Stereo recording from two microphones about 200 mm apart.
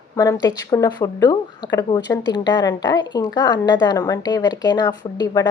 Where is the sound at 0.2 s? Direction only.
20° left (ahead or behind).